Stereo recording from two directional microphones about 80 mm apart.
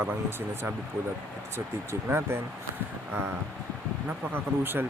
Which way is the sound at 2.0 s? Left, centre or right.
Right.